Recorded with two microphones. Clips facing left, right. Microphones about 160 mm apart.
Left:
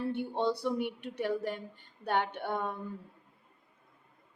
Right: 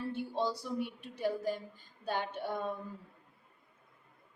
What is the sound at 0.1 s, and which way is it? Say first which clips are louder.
A woman's voice: left 2 dB; 65° left (ahead or behind).